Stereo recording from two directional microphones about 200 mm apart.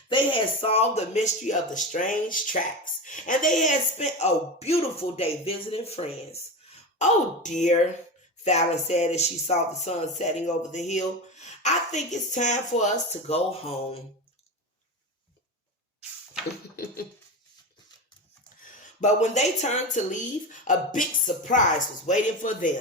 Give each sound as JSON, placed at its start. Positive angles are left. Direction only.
{"t": 0.1, "sound": "speech", "side_deg": 25}
{"t": 18.6, "sound": "a woman's voice", "side_deg": 40}